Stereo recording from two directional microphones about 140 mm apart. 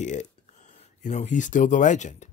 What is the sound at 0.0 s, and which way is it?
Speech, 60° left (ahead or behind).